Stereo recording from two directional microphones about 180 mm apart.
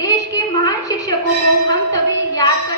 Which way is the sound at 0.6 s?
20° left (ahead or behind).